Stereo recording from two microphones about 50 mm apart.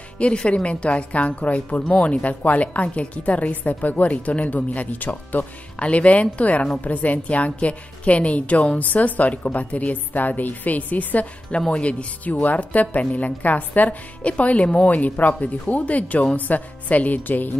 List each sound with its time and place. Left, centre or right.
0.2 s a woman's voice: left
5.8 s a woman's voice: left